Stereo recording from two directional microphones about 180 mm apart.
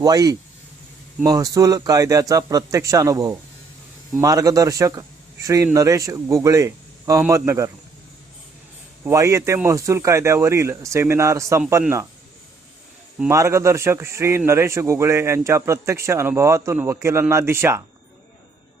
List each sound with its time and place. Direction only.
0.0 s a man's voice: 20° right (ahead or behind)
9.0 s a man's voice: 15° right (ahead or behind)
13.1 s a man's voice: 15° right (ahead or behind)